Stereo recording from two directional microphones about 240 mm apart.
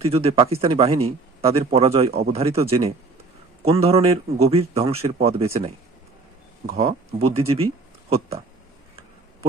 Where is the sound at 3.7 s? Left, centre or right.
Right.